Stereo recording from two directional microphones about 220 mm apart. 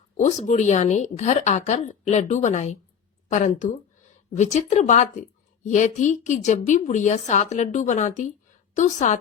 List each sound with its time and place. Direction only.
0.2 s a woman's voice: 30° left (ahead or behind)